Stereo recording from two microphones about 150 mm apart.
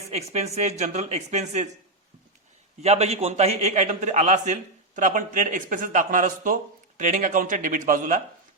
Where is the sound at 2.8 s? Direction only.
45° right (ahead or behind).